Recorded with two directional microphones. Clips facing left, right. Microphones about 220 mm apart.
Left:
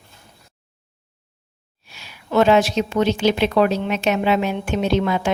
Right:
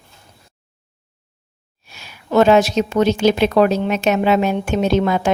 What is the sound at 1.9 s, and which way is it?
A woman's voice, 45° right (ahead or behind).